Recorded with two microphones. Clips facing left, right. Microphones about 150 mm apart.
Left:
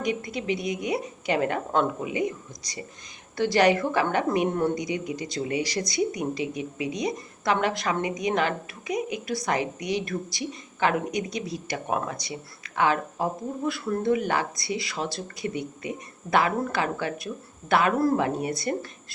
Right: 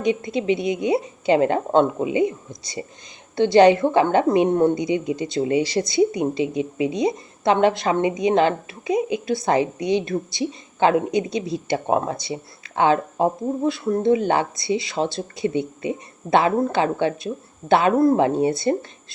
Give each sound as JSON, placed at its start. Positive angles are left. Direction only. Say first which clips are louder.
{"t": 0.0, "sound": "a woman's voice", "louder": "right 7 dB", "side_deg": -25}